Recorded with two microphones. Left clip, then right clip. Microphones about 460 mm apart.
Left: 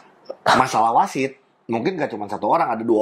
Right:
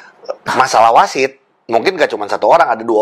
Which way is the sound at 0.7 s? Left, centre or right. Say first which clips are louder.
Right 9 dB; right.